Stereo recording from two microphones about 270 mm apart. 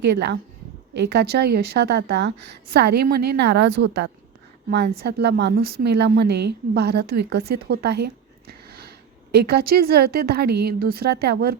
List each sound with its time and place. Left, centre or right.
1.0 s a woman's voice: right